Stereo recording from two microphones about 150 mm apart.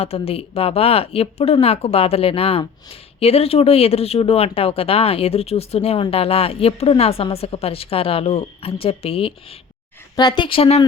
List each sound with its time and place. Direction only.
0.0 s speech: 40° left (ahead or behind)